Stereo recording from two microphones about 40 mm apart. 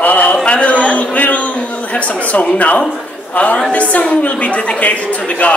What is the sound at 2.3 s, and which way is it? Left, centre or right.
A woman's voice, left.